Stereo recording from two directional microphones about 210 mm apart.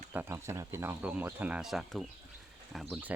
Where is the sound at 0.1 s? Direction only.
10° right (ahead or behind).